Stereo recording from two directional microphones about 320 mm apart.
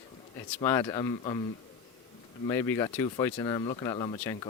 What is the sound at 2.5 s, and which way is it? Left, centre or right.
Speech, centre.